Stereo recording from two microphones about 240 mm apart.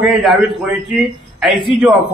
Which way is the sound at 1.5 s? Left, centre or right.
Right.